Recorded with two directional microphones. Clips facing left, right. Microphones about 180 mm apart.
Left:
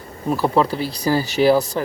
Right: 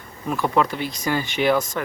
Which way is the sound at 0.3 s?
35° left (ahead or behind).